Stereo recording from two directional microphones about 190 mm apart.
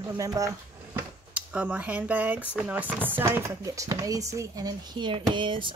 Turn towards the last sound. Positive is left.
turn(degrees=-25)  # may be behind; listen again after turning